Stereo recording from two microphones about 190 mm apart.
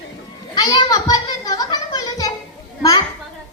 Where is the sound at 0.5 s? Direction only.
20° left (ahead or behind).